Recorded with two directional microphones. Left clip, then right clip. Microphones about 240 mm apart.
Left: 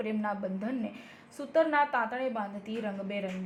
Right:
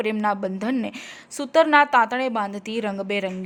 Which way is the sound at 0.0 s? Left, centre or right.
Right.